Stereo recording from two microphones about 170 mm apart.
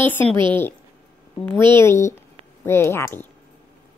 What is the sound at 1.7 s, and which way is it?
A child's voice, 15° left (ahead or behind).